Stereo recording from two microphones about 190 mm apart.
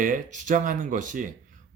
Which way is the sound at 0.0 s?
45° right (ahead or behind).